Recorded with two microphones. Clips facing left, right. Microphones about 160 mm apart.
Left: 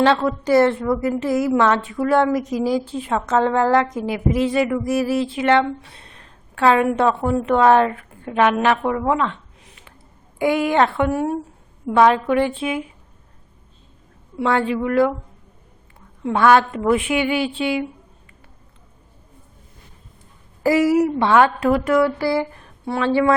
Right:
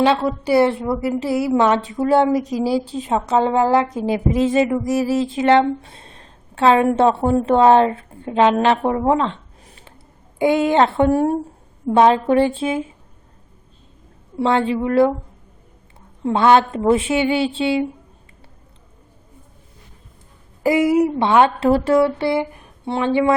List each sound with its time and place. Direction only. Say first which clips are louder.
0.0 s a woman's voice: even; 15° right (ahead or behind)
2.6 s music: right 1 dB; 30° right (ahead or behind)
2.8 s a woman's voice: right 2 dB; 20° right (ahead or behind)
3.8 s a woman's voice: right 2 dB; 30° right (ahead or behind)
5.0 s music: right 1 dB; 35° right (ahead or behind)
5.4 s a woman's voice: right 4 dB; 30° right (ahead or behind)
14.3 s a woman's voice: right 2 dB; 25° right (ahead or behind)
16.2 s a woman's voice: right 1 dB; 25° right (ahead or behind)
20.7 s a woman's voice: even; 20° right (ahead or behind)